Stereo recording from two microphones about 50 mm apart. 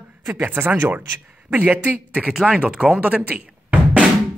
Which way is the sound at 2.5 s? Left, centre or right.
Right.